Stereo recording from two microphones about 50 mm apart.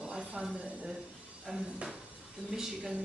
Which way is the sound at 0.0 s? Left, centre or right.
Centre.